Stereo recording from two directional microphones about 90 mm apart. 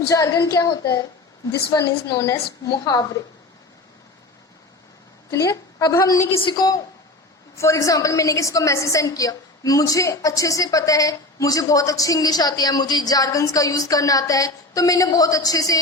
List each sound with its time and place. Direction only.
0.1 s a woman's voice: 40° left (ahead or behind)
2.2 s a woman's voice: 40° left (ahead or behind)
5.3 s a woman's voice: 35° left (ahead or behind)
6.3 s a woman's voice: 70° left (ahead or behind)
7.5 s a woman's voice: 35° left (ahead or behind)